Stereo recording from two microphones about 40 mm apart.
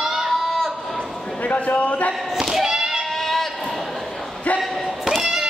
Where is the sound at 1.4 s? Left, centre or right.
Left.